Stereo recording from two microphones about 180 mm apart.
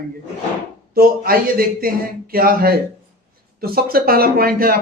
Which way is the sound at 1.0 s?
55° right (ahead or behind).